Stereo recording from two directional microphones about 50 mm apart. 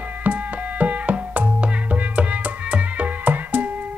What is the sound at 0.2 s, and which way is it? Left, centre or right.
Music, right.